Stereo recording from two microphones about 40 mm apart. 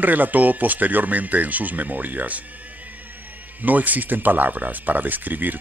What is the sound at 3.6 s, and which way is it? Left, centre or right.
Speech, right.